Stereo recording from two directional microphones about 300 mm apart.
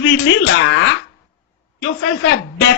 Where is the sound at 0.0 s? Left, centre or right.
Left.